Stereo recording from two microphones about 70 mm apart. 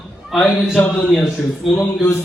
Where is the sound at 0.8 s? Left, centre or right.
Left.